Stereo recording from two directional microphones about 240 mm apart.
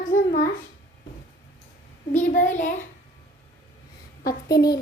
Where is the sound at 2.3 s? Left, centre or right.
Left.